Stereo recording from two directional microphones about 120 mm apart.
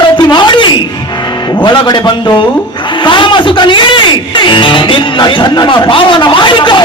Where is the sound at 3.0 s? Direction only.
40° left (ahead or behind).